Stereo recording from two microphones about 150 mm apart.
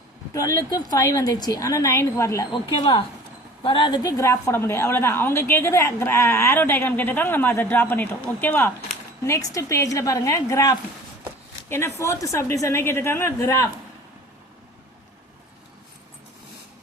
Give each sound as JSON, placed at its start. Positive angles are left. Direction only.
{"t": 0.3, "sound": "a woman's voice", "side_deg": 20}
{"t": 3.6, "sound": "a woman's voice", "side_deg": 30}